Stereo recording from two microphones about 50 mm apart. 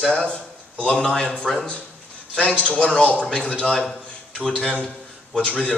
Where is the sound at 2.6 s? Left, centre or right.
Left.